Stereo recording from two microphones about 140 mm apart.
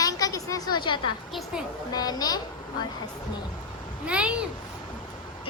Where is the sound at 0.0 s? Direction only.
25° left (ahead or behind).